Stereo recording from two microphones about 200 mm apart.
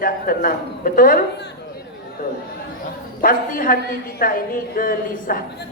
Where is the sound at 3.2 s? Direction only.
45° left (ahead or behind).